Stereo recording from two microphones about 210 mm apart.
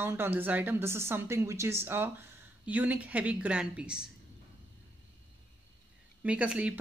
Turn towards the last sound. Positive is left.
turn(degrees=-5)  # may be behind; listen again after turning